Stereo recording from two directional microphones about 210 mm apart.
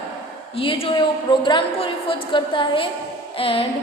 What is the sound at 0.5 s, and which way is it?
A woman's voice, 25° left (ahead or behind).